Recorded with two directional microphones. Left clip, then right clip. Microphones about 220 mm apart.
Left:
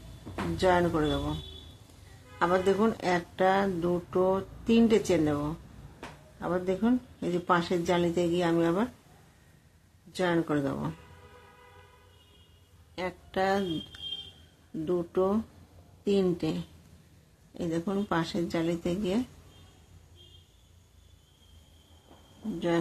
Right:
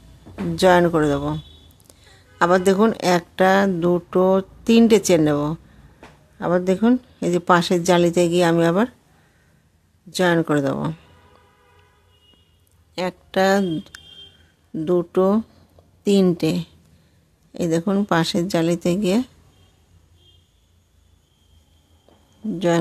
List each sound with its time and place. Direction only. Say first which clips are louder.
0.6 s speech: right 10 dB; 50° right (ahead or behind)
10.1 s speech: right 10 dB; 50° right (ahead or behind)
12.9 s speech: right 10 dB; 50° right (ahead or behind)